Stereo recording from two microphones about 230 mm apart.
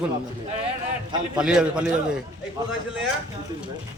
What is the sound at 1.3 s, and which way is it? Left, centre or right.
Speech, centre.